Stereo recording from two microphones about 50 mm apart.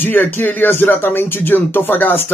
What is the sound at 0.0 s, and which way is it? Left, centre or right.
Speech, left.